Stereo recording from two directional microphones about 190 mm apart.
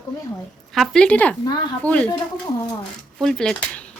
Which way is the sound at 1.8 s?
5° left (ahead or behind).